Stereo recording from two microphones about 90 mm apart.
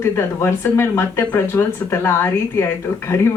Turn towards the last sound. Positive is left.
turn(degrees=30)  # may be behind; listen again after turning